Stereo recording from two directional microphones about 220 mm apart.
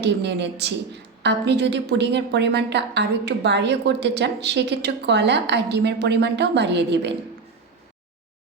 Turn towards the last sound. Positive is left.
turn(degrees=-50)  # may be behind; listen again after turning